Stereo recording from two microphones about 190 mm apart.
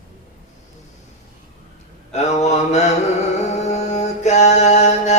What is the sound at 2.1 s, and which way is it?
Mantra, 35° left (ahead or behind).